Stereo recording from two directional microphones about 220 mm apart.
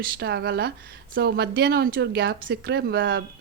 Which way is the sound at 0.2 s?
50° right (ahead or behind).